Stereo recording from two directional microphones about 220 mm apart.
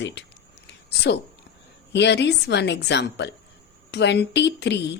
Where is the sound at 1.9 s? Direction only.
50° left (ahead or behind).